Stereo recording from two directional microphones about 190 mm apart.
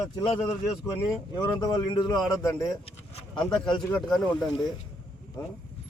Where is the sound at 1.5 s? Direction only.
20° left (ahead or behind).